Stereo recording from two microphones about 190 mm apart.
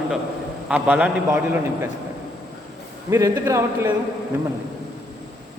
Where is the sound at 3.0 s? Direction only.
15° right (ahead or behind).